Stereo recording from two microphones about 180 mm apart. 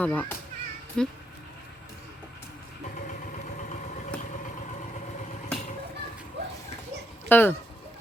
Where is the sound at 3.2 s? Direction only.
45° left (ahead or behind).